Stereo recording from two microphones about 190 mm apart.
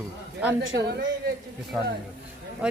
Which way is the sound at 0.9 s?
60° right (ahead or behind).